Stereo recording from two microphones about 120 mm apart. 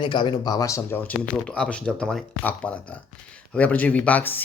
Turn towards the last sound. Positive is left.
turn(degrees=15)  # may be behind; listen again after turning